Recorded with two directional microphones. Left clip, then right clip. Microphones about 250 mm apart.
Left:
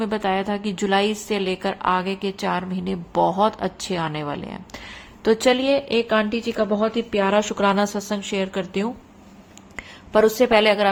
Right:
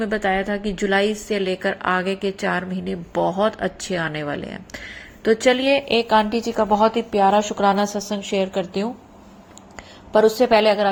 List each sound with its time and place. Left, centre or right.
0.0 s a woman's voice: centre
8.5 s a woman's voice: left
10.2 s a woman's voice: left